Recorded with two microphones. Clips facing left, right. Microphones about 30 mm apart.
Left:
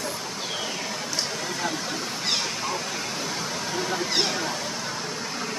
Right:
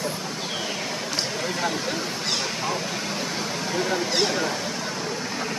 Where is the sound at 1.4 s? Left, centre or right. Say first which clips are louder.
Right 3 dB; centre.